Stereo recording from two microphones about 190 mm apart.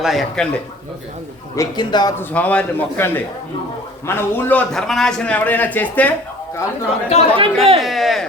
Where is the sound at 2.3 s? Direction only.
5° left (ahead or behind).